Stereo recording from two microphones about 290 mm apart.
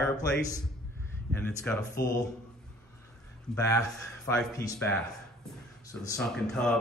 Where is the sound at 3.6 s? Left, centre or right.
Centre.